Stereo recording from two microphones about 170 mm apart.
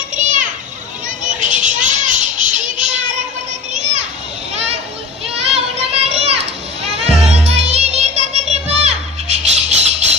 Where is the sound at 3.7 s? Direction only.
45° right (ahead or behind).